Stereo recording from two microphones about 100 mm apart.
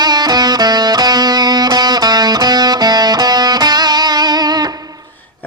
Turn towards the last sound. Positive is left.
turn(degrees=-45)  # may be behind; listen again after turning